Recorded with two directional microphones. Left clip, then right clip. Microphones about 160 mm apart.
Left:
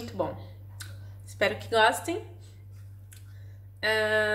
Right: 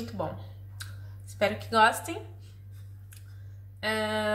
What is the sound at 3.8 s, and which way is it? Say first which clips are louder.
Speech: left 4 dB; 40° left (ahead or behind).